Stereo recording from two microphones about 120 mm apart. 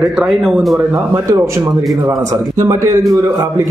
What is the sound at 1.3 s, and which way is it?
Speech, 25° right (ahead or behind).